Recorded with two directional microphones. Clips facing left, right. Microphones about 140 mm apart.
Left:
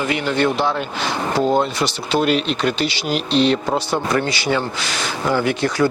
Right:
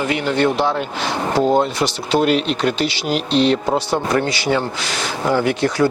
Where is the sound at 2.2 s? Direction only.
45° right (ahead or behind).